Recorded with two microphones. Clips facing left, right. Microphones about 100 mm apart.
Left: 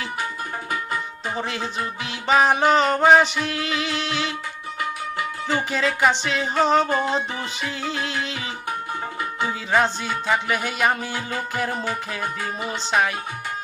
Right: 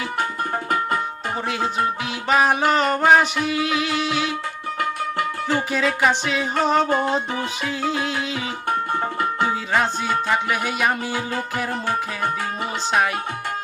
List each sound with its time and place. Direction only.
0.7 s music: 55° right (ahead or behind)
1.5 s music: 5° right (ahead or behind)
5.5 s music: centre (ahead or behind)
9.0 s tabla: 50° right (ahead or behind)
9.7 s music: 5° right (ahead or behind)